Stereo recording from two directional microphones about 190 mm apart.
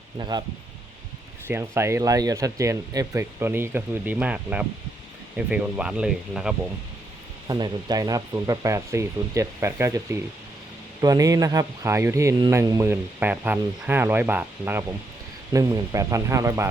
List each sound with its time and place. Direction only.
0.2 s speech: 20° right (ahead or behind)
1.5 s speech: 15° right (ahead or behind)
7.4 s speech: 20° right (ahead or behind)